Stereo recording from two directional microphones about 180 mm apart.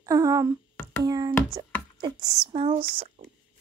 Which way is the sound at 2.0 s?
25° right (ahead or behind).